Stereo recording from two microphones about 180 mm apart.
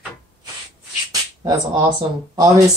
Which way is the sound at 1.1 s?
20° right (ahead or behind).